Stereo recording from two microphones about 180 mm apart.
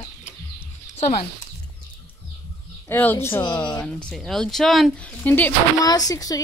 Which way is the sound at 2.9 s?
10° left (ahead or behind).